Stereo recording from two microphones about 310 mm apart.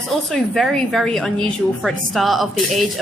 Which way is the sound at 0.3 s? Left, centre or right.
Centre.